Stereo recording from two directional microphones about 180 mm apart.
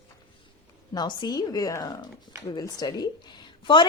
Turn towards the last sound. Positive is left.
turn(degrees=25)  # may be behind; listen again after turning